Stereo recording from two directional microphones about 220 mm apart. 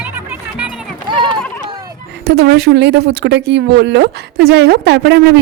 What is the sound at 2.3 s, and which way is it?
A woman's voice, 45° right (ahead or behind).